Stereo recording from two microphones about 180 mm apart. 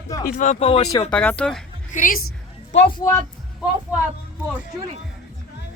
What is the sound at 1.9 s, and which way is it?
Speech, 50° left (ahead or behind).